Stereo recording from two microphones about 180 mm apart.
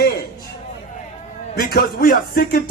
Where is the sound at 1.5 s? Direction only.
55° left (ahead or behind).